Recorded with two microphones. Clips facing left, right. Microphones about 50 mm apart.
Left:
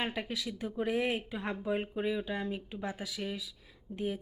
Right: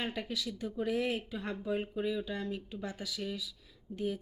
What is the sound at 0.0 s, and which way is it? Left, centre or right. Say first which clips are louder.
A woman's voice: left 1 dB; centre.